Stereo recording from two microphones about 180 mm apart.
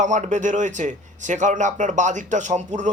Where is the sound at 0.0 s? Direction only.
40° right (ahead or behind).